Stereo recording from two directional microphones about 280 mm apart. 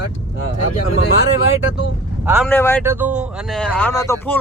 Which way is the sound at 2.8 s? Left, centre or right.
Centre.